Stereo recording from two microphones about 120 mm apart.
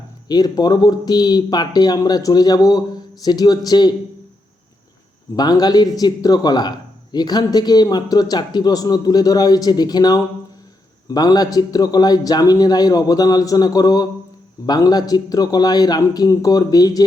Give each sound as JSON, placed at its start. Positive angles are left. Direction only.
{"t": 0.3, "sound": "a man's voice", "side_deg": 35}
{"t": 5.4, "sound": "a man's voice", "side_deg": 35}